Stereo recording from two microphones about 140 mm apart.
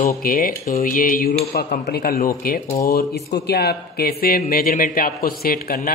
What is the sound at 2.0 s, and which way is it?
Speech, 90° left.